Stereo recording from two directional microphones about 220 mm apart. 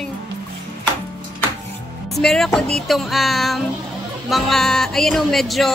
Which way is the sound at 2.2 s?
Centre (ahead or behind).